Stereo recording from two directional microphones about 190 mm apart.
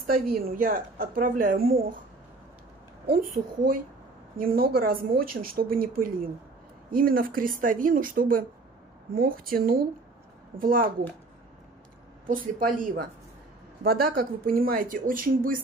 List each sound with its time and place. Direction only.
0.0 s a woman's voice: 50° right (ahead or behind)
4.4 s a woman's voice: 50° right (ahead or behind)
12.3 s a woman's voice: 45° right (ahead or behind)